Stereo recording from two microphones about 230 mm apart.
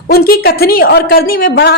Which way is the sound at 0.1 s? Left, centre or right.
Left.